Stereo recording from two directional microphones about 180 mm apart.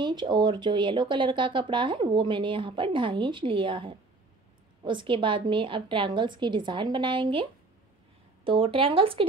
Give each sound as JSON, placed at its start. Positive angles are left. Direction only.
{"t": 0.0, "sound": "speech", "side_deg": -25}
{"t": 8.5, "sound": "speech", "side_deg": -30}